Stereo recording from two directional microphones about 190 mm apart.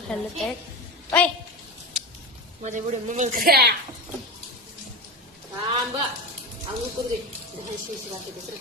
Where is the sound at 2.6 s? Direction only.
40° right (ahead or behind).